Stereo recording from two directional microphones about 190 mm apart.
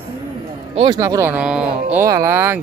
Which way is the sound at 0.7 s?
20° right (ahead or behind).